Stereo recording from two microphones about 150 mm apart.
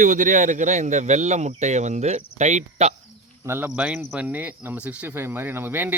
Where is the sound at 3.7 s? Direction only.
5° right (ahead or behind).